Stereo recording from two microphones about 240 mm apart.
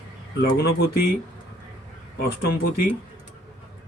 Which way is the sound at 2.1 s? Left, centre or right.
Left.